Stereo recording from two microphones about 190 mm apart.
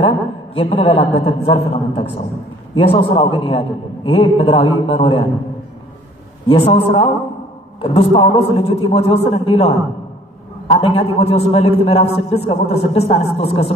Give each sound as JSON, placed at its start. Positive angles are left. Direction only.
{"t": 0.6, "sound": "a man's voice", "side_deg": 30}
{"t": 6.5, "sound": "a man's voice", "side_deg": 30}